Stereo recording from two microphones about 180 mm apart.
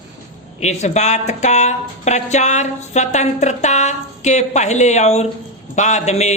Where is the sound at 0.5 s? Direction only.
40° left (ahead or behind).